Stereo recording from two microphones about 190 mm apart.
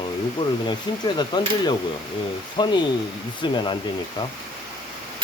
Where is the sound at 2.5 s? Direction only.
25° left (ahead or behind).